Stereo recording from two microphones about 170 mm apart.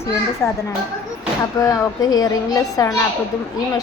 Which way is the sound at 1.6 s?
20° left (ahead or behind).